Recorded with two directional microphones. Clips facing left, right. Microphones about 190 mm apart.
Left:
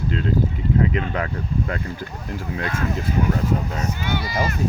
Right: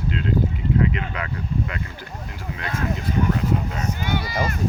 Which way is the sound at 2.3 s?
40° left (ahead or behind).